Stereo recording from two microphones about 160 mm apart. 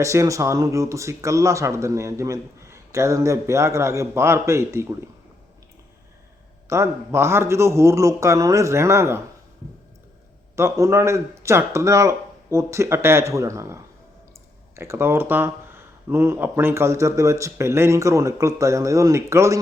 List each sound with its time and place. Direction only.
0.0 s speech: 20° right (ahead or behind)
6.7 s speech: 15° right (ahead or behind)
10.5 s speech: 20° right (ahead or behind)
14.8 s speech: 15° right (ahead or behind)